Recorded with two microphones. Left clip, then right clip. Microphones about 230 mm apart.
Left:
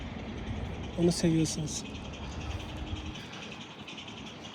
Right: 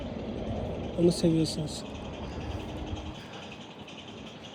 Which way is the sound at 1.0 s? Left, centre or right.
Centre.